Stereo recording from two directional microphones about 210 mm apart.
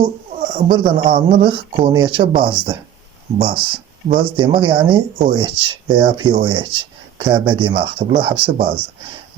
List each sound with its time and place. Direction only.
0.7 s speech: 25° right (ahead or behind)